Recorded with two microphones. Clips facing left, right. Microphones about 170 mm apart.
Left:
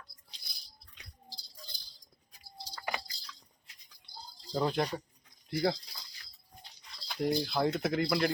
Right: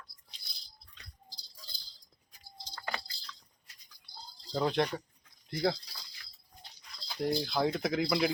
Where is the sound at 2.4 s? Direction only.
10° left (ahead or behind).